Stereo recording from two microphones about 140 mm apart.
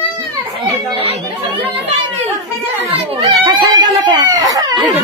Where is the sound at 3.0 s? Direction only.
35° right (ahead or behind).